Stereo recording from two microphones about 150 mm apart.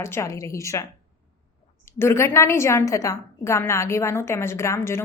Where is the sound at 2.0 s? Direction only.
15° left (ahead or behind).